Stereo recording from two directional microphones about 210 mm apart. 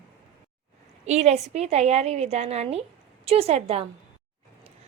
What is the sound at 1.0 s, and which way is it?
A woman's voice, 30° right (ahead or behind).